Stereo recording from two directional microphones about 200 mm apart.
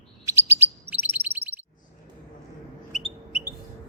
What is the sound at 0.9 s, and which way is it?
Chirp tone, 10° right (ahead or behind).